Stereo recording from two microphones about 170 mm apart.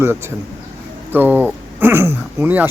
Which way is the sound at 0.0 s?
15° right (ahead or behind).